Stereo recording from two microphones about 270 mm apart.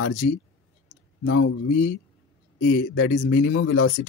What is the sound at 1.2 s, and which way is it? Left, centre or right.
Speech, left.